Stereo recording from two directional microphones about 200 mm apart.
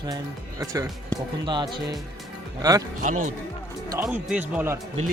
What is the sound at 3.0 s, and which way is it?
Speech, 40° right (ahead or behind).